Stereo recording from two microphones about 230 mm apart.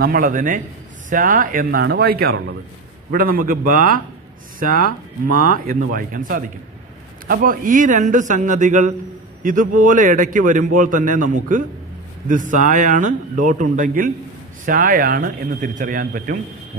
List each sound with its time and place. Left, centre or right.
0.0 s a man's voice: right